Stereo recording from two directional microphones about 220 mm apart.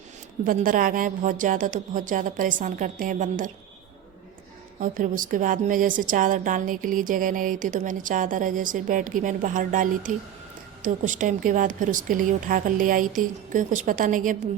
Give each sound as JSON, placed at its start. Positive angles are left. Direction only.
{"t": 0.4, "sound": "a woman's voice", "side_deg": -40}
{"t": 4.8, "sound": "a woman's voice", "side_deg": -35}